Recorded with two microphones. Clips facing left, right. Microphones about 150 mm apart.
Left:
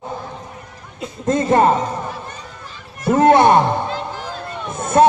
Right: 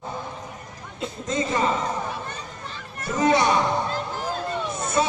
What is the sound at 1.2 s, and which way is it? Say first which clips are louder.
Speech: left 10 dB; 55° left (ahead or behind).